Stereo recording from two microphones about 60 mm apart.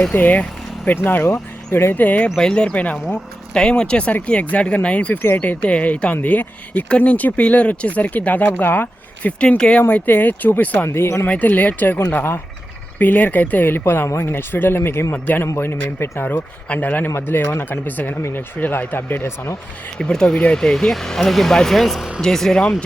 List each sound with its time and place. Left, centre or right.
0.1 s speech: left
2.3 s speech: centre; by 9.3 s left
9.4 s speech: centre
10.1 s speech: left
10.8 s speech: left
11.3 s speech: left
13.0 s speech: left
15.5 s speech: left
16.2 s speech: left
17.2 s speech: left
20.0 s speech: centre